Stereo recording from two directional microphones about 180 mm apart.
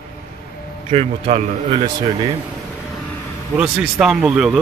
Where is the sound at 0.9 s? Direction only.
35° right (ahead or behind).